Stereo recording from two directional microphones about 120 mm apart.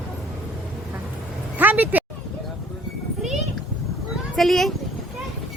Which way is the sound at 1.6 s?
15° right (ahead or behind).